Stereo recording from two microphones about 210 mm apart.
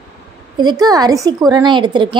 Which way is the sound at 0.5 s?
20° right (ahead or behind).